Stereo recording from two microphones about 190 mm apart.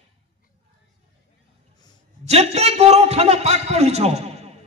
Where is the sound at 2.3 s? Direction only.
35° right (ahead or behind).